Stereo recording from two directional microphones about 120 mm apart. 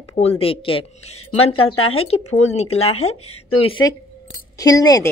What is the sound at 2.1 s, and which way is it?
Speech, 65° left (ahead or behind).